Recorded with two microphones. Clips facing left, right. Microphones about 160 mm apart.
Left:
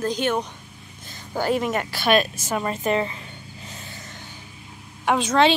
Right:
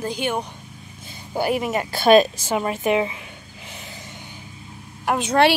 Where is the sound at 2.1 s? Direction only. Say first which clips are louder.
Right 6 dB; 35° right (ahead or behind).